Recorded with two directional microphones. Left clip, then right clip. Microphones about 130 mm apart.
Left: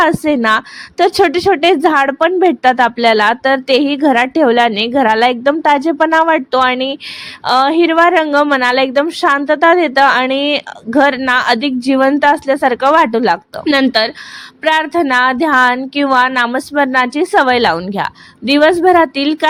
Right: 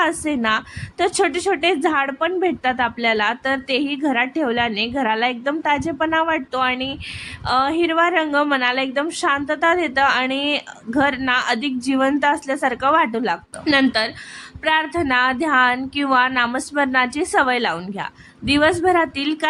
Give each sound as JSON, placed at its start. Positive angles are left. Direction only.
{"t": 0.0, "sound": "a woman's voice", "side_deg": 50}
{"t": 18.4, "sound": "speech", "side_deg": 35}